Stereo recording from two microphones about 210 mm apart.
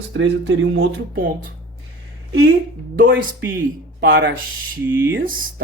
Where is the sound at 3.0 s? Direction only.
45° right (ahead or behind).